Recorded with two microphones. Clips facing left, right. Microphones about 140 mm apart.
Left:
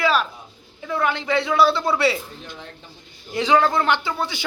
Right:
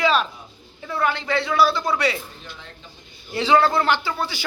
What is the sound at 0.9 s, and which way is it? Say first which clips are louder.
Speech: left 1 dB; 20° left (ahead or behind).